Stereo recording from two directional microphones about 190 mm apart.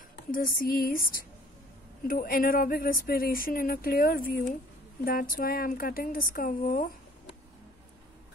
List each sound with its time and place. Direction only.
0.3 s speech: 50° left (ahead or behind)